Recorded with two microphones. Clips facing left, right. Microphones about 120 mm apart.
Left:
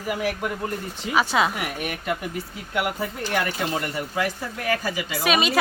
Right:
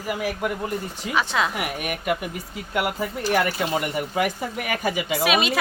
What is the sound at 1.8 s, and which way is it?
Speech, 10° right (ahead or behind).